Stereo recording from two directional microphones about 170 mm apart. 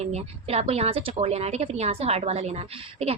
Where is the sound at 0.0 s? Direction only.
40° right (ahead or behind).